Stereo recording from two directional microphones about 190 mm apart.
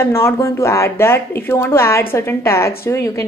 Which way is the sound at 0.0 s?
15° left (ahead or behind).